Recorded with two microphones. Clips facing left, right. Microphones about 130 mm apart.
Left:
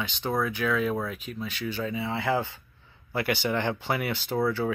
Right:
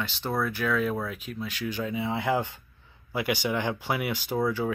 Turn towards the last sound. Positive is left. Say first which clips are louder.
# left 1 dB
turn(degrees=-10)  # may be behind; listen again after turning